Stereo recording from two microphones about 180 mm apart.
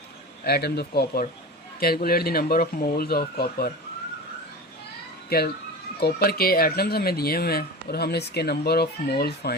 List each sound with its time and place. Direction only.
0.4 s speech: 65° left (ahead or behind)
6.0 s speech: 65° left (ahead or behind)